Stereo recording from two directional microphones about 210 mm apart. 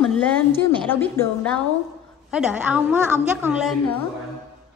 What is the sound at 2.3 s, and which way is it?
A woman's voice, 5° right (ahead or behind).